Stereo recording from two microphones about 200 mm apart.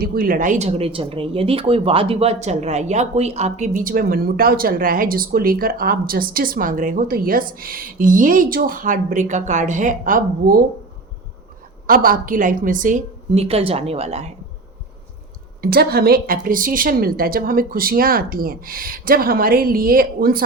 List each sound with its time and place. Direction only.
0.0 s speech: 45° right (ahead or behind)
11.9 s speech: 45° right (ahead or behind)
15.6 s speech: 50° right (ahead or behind)